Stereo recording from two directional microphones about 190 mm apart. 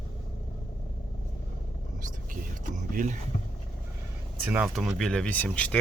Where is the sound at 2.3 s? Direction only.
45° right (ahead or behind).